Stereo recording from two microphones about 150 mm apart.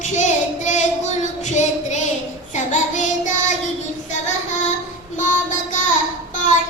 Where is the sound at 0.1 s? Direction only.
50° left (ahead or behind).